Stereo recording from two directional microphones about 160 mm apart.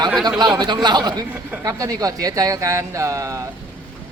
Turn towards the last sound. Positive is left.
turn(degrees=-20)  # may be behind; listen again after turning